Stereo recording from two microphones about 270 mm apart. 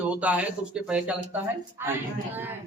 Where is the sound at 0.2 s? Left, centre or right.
Centre.